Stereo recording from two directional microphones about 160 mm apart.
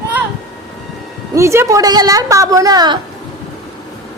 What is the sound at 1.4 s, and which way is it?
A woman's voice, 20° right (ahead or behind).